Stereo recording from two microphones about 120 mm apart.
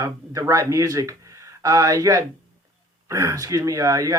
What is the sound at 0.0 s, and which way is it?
Speech, 25° right (ahead or behind).